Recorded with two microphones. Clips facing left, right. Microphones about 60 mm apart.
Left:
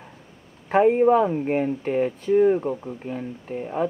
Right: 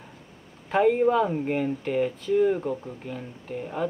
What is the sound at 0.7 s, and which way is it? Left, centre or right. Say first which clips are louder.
Speech: left 4 dB; left.